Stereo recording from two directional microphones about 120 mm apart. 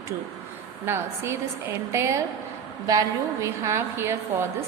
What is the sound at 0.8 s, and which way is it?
A woman's voice, 20° right (ahead or behind).